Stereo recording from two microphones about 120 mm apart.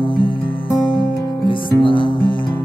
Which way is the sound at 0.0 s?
45° left (ahead or behind).